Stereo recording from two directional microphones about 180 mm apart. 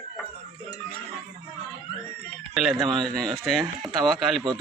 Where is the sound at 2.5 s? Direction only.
Centre (ahead or behind).